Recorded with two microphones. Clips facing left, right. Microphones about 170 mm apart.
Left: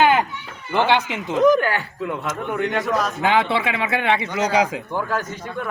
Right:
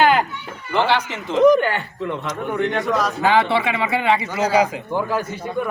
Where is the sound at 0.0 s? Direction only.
20° left (ahead or behind).